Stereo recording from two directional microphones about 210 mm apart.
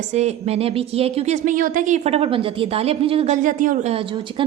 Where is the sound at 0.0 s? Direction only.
35° right (ahead or behind).